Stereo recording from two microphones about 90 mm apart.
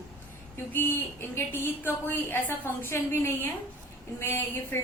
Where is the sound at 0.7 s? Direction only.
25° left (ahead or behind).